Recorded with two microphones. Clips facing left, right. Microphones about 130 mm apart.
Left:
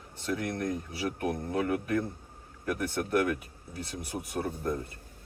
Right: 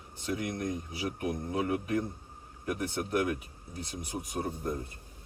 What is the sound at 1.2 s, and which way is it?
Speech, 55° left (ahead or behind).